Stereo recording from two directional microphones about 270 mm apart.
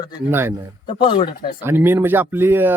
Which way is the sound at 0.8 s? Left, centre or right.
Centre.